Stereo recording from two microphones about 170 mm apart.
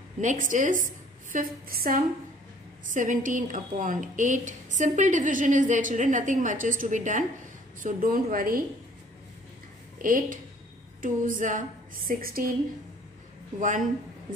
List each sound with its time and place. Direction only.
0.2 s a woman's voice: 50° right (ahead or behind)
10.0 s a woman's voice: 55° right (ahead or behind)
13.6 s a woman's voice: 50° right (ahead or behind)